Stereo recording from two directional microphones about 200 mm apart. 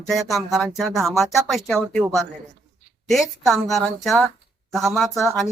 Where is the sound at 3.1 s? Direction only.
Centre (ahead or behind).